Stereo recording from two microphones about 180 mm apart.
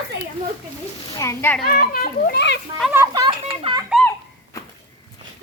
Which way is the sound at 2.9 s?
20° right (ahead or behind).